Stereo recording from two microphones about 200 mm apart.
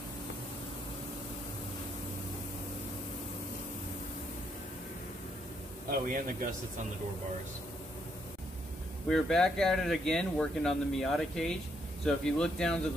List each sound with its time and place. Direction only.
5.9 s a man's voice: 45° right (ahead or behind)
9.1 s speech: centre (ahead or behind)